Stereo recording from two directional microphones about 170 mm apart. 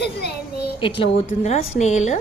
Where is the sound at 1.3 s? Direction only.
45° left (ahead or behind).